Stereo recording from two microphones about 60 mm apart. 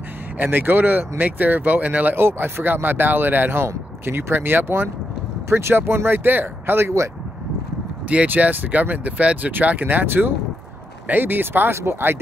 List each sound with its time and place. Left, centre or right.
0.4 s speech: right
2.2 s speech: right
8.1 s speech: right